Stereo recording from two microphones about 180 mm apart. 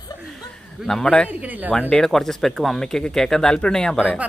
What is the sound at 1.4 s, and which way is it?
Speech, 10° right (ahead or behind).